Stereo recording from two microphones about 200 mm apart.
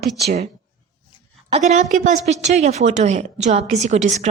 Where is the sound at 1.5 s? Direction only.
35° right (ahead or behind).